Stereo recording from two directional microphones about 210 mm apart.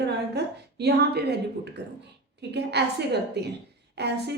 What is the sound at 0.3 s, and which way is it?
A woman's voice, 50° right (ahead or behind).